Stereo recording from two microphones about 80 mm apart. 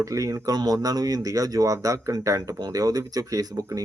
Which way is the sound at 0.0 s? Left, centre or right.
Right.